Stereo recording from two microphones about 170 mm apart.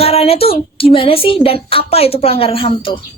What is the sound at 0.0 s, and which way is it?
Speech, 35° left (ahead or behind).